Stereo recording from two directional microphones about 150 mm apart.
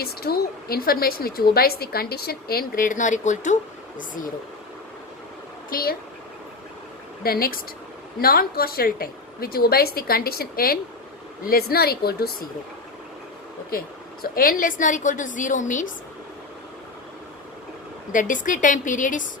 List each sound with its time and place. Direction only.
0.0 s a woman's voice: 90° left; by 4.3 s 65° left (ahead or behind)
5.7 s speech: 85° left
7.2 s a woman's voice: 80° left
11.4 s a woman's voice: 90° left
13.7 s a woman's voice: 75° left (ahead or behind); by 15.9 s 55° left (ahead or behind)
18.1 s a woman's voice: 60° left (ahead or behind)